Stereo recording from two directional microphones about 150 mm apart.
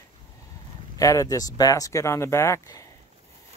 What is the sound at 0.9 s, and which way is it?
Speech, 25° left (ahead or behind).